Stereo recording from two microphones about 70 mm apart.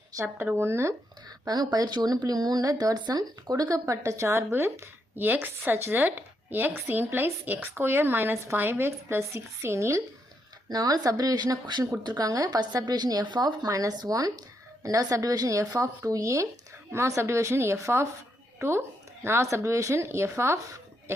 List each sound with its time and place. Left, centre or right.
0.5 s speech: right
1.5 s speech: right
10.7 s speech: right
12.0 s speech: right